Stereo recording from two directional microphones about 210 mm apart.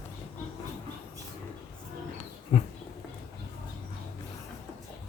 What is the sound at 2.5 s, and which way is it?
Dog, 25° left (ahead or behind).